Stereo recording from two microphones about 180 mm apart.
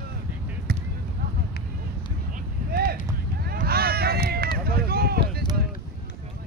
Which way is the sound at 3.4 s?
60° right (ahead or behind).